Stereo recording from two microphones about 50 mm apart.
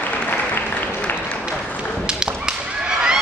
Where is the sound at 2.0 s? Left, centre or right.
Centre.